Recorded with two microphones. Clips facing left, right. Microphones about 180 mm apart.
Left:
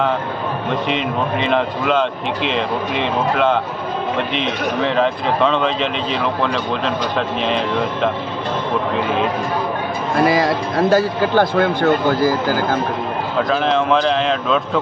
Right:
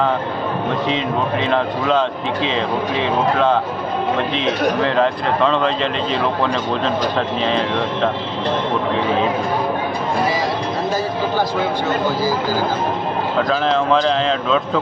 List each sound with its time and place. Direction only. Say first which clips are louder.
4.8 s speech: even; centre (ahead or behind)
10.9 s a man's voice: left 6 dB; 65° left (ahead or behind)
13.5 s speech: left 1 dB; 5° left (ahead or behind)